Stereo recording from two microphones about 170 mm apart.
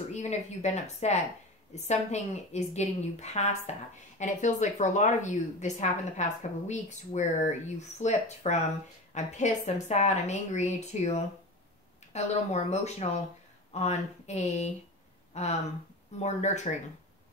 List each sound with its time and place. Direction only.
0.1 s a woman's voice: 40° left (ahead or behind)